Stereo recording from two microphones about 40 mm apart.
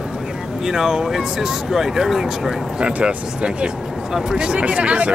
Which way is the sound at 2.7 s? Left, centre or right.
Right.